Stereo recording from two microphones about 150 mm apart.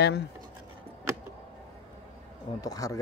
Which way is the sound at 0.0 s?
90° left.